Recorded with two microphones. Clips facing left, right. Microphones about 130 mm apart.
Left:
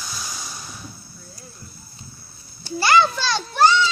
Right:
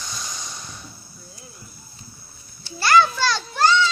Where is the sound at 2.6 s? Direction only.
15° left (ahead or behind).